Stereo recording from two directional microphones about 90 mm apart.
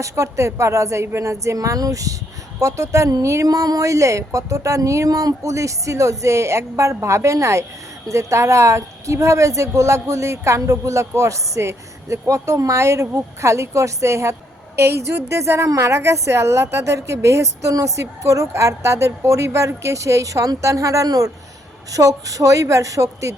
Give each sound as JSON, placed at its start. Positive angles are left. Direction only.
{"t": 0.0, "sound": "a woman's voice", "side_deg": -35}